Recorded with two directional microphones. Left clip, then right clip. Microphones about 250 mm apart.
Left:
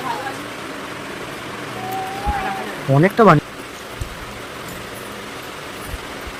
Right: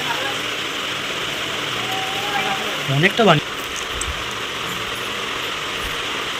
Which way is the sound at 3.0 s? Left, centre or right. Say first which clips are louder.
Left 2 dB; centre.